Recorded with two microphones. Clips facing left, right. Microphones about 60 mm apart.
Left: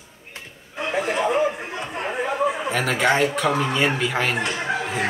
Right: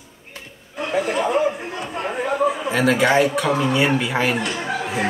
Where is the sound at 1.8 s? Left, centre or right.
Left.